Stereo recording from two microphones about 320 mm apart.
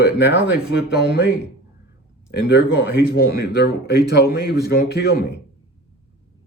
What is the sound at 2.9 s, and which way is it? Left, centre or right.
Speech, left.